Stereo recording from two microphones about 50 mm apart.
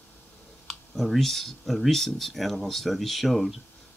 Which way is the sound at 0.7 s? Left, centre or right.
Centre.